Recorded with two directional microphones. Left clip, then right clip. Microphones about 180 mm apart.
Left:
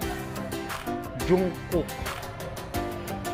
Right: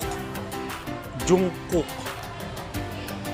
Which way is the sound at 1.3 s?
15° right (ahead or behind).